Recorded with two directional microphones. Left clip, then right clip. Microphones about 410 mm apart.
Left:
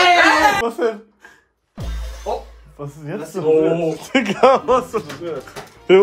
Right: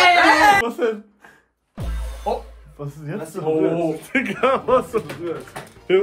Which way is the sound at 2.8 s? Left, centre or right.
Centre.